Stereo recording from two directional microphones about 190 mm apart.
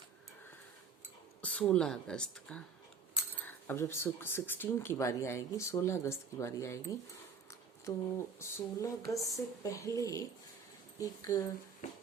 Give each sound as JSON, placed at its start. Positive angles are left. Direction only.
{"t": 1.4, "sound": "speech", "side_deg": 5}